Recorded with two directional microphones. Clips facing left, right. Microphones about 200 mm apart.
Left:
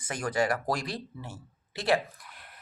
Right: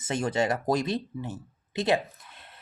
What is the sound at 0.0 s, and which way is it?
Speech, 25° right (ahead or behind).